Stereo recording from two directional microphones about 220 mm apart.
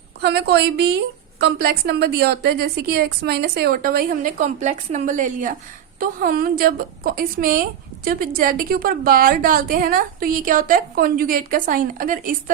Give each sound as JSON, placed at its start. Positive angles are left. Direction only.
{"t": 0.2, "sound": "a woman's voice", "side_deg": -50}